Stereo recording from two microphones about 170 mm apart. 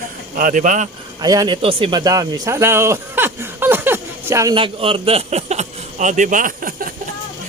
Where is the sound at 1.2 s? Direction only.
20° right (ahead or behind).